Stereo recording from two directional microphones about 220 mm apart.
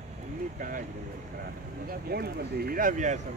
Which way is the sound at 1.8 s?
45° right (ahead or behind).